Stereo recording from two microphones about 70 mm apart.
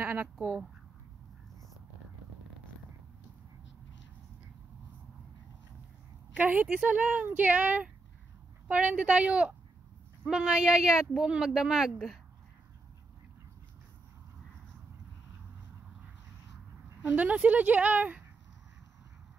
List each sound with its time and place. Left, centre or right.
0.0 s speech: right
6.3 s a woman's voice: right; by 12.2 s centre
17.1 s speech: right